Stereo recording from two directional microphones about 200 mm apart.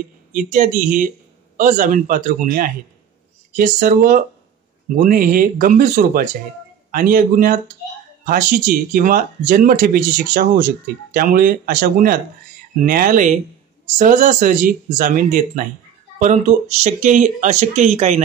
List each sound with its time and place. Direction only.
0.3 s speech: 40° right (ahead or behind)